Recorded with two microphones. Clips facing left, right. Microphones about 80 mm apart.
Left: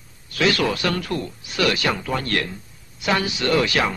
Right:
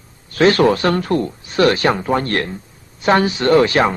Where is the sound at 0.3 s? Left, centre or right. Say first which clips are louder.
Right 8 dB; right.